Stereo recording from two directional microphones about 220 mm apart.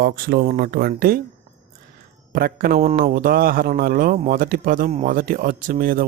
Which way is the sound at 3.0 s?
40° right (ahead or behind).